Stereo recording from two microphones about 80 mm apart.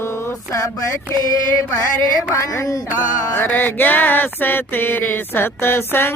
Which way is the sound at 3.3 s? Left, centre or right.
Left.